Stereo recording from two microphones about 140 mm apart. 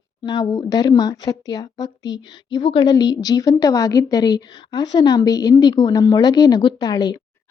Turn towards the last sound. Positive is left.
turn(degrees=30)  # may be behind; listen again after turning